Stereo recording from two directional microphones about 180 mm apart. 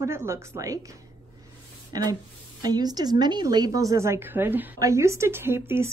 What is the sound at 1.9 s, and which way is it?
A woman's voice, 20° right (ahead or behind).